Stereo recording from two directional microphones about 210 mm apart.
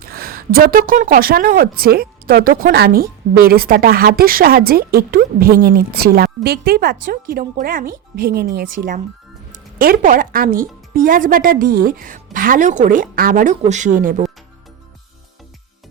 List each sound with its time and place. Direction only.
0.0 s a woman's voice: 45° right (ahead or behind)